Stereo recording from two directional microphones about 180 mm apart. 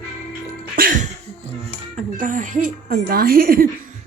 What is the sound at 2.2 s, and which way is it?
A woman's voice, 45° right (ahead or behind).